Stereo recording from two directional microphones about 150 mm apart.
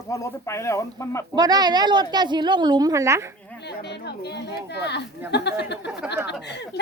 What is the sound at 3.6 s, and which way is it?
Speech, 90° left.